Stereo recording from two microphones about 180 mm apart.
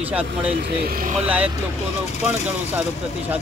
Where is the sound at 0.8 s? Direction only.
50° right (ahead or behind).